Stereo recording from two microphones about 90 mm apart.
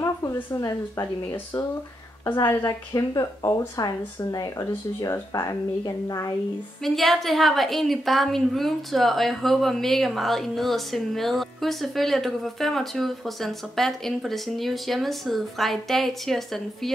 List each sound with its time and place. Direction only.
0.0 s a woman's voice: 35° left (ahead or behind)
2.6 s speech: 40° left (ahead or behind)
6.8 s a woman's voice: centre (ahead or behind)